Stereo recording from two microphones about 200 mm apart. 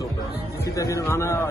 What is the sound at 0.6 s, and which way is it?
Speech, 15° left (ahead or behind).